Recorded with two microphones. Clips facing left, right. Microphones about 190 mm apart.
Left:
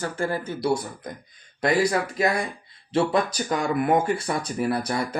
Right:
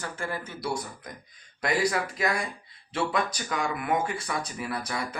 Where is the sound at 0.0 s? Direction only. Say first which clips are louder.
Left 7 dB; 35° left (ahead or behind).